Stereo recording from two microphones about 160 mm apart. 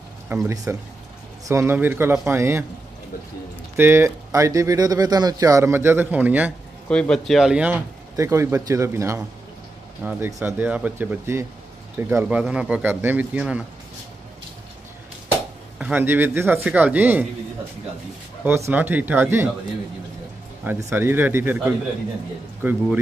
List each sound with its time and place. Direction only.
0.3 s speech: 15° right (ahead or behind)
3.7 s speech: 15° right (ahead or behind)
6.9 s speech: 5° left (ahead or behind)
15.8 s speech: 10° right (ahead or behind)
18.7 s speech: 10° right (ahead or behind)
20.6 s speech: 15° right (ahead or behind)